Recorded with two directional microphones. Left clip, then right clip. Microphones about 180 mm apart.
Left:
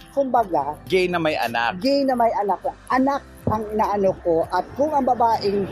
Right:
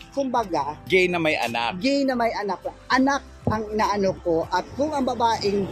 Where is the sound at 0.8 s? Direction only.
10° right (ahead or behind).